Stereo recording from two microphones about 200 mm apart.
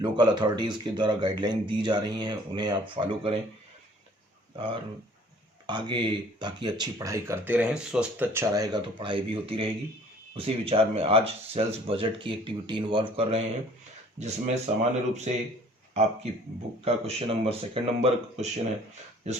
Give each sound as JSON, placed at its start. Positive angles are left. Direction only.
{"t": 0.0, "sound": "speech", "side_deg": -20}
{"t": 4.5, "sound": "speech", "side_deg": -25}
{"t": 16.8, "sound": "speech", "side_deg": -30}